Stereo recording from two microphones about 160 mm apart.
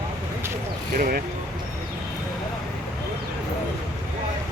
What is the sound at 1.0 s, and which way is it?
Speech, 65° right (ahead or behind).